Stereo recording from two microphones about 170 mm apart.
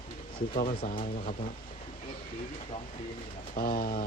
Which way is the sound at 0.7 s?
35° left (ahead or behind).